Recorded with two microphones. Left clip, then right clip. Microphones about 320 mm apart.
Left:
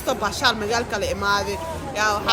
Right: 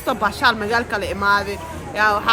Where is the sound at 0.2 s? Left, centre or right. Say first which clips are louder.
Right 6 dB; right.